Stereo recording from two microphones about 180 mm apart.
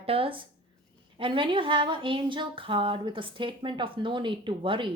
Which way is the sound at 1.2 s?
30° right (ahead or behind).